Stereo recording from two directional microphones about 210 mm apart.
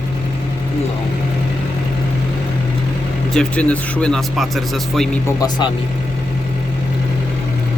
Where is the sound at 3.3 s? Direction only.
5° left (ahead or behind).